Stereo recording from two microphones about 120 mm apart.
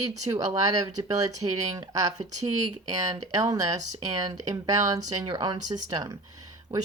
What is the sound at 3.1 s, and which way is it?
Speech, 35° right (ahead or behind).